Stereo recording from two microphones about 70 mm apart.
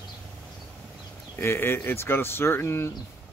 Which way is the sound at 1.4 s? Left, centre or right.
Left.